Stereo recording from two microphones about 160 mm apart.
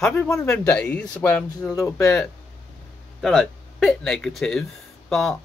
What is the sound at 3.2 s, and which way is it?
Speech, centre (ahead or behind).